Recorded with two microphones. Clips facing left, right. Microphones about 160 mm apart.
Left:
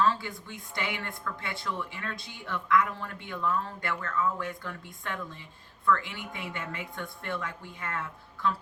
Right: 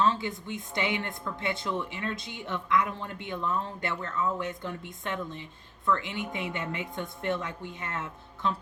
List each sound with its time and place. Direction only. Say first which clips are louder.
0.0 s speech: right 1 dB; 20° right (ahead or behind)